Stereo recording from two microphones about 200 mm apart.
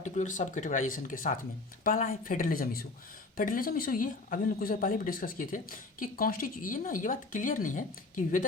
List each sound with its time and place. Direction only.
0.0 s speech: 40° left (ahead or behind)